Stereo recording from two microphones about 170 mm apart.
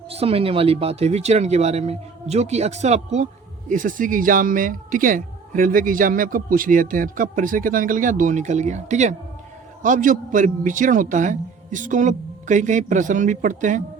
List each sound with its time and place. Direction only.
0.1 s speech: 35° right (ahead or behind)